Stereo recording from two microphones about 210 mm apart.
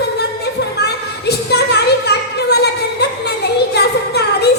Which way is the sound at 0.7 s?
50° left (ahead or behind).